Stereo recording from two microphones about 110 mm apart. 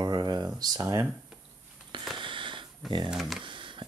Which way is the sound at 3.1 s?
5° right (ahead or behind).